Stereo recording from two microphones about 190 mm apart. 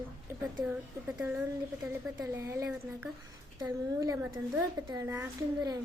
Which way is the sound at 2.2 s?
15° right (ahead or behind).